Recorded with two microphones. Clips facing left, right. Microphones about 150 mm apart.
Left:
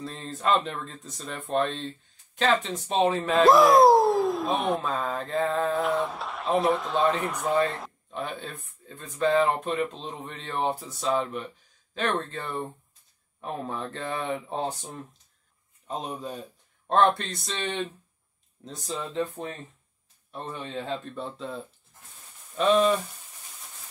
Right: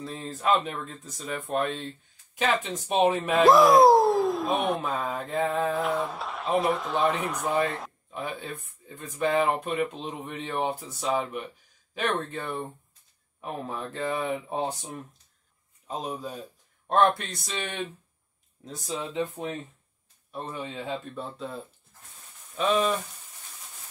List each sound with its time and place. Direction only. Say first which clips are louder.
0.0 s speech: even; 5° right (ahead or behind)
2.9 s speech: right 1 dB; 15° right (ahead or behind)
3.3 s speech: left 1 dB; centre (ahead or behind)
4.9 s speech: left 1 dB; 10° right (ahead or behind)
5.6 s speech: left 1 dB; centre (ahead or behind)
15.9 s speech: even; 5° right (ahead or behind)
22.6 s speech: left 3 dB; 5° right (ahead or behind)